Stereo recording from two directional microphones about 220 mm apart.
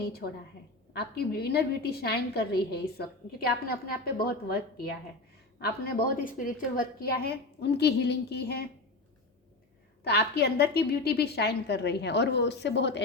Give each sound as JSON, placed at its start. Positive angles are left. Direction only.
{"t": 0.9, "sound": "a woman's voice", "side_deg": 45}
{"t": 10.0, "sound": "a woman's voice", "side_deg": 50}